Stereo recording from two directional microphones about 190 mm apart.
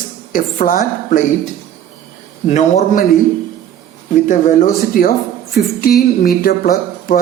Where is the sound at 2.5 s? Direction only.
40° left (ahead or behind).